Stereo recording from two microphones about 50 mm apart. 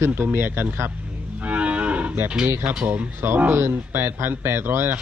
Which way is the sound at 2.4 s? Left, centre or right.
Right.